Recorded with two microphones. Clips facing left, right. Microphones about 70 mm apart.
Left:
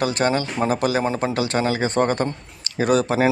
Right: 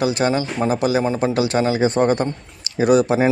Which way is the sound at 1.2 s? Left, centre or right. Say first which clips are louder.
Right 3 dB; left.